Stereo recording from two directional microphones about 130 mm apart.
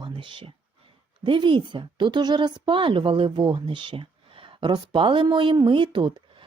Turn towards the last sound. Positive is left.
turn(degrees=-40)  # may be behind; listen again after turning